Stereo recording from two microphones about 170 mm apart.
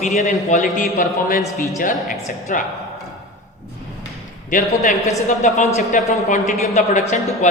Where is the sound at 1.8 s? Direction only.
50° left (ahead or behind).